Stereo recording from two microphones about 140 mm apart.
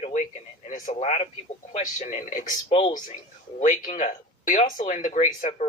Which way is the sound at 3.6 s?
60° left (ahead or behind).